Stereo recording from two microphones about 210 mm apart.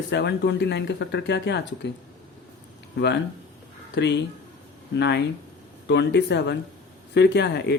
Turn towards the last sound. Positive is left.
turn(degrees=55)  # may be behind; listen again after turning